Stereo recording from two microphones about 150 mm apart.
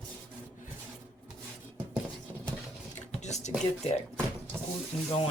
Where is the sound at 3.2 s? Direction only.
50° left (ahead or behind).